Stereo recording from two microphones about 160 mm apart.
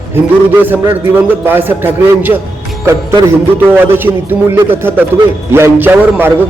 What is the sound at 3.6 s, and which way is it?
Speech, 10° right (ahead or behind).